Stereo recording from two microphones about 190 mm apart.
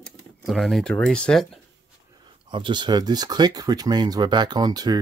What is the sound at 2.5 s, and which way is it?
Speech, 25° right (ahead or behind).